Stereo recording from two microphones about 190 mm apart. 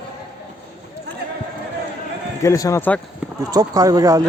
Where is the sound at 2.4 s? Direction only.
15° left (ahead or behind).